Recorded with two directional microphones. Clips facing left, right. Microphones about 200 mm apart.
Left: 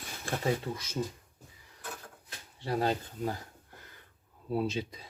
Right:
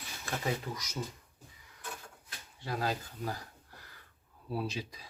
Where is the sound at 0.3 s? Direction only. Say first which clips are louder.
Left 4 dB; 30° left (ahead or behind).